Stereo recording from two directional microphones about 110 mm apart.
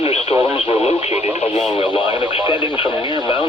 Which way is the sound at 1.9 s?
50° left (ahead or behind).